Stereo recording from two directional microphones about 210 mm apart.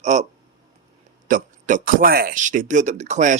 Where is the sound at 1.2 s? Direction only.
40° right (ahead or behind).